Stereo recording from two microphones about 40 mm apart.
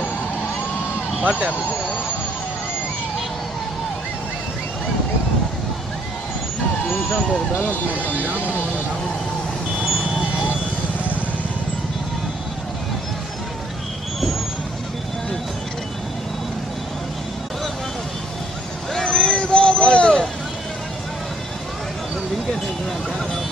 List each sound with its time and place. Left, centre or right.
1.2 s speech: right
7.9 s speech: right
8.5 s vehicle: right
18.9 s vehicle: centre
19.3 s a sound: left